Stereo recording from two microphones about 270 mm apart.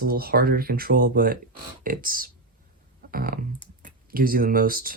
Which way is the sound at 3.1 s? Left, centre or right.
Right.